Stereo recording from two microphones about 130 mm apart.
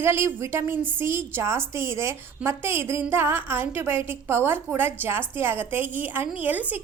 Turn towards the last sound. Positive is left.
turn(degrees=-15)  # may be behind; listen again after turning